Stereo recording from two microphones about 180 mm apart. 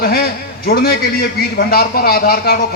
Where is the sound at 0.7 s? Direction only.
60° left (ahead or behind).